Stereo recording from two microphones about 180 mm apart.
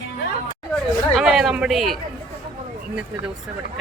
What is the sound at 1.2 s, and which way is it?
Speech, centre (ahead or behind).